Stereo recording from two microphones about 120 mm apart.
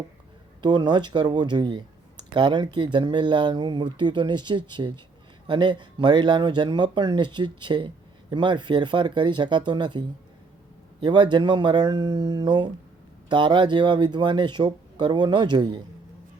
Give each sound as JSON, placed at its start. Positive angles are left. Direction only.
{"t": 0.6, "sound": "speech", "side_deg": -40}
{"t": 11.0, "sound": "speech", "side_deg": -40}